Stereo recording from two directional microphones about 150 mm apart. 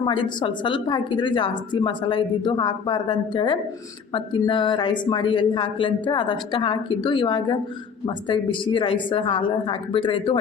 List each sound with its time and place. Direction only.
0.0 s a woman's voice: 30° left (ahead or behind)